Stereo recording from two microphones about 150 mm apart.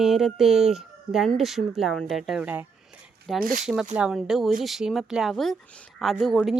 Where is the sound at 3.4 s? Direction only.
65° right (ahead or behind).